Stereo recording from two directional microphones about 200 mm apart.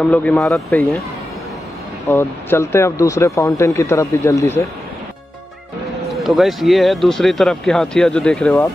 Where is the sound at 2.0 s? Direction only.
15° left (ahead or behind).